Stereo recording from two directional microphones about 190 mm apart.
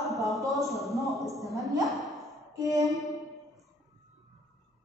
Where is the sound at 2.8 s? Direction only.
Centre (ahead or behind).